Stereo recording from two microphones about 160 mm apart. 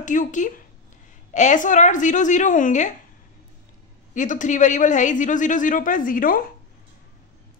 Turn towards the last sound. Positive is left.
turn(degrees=60)  # may be behind; listen again after turning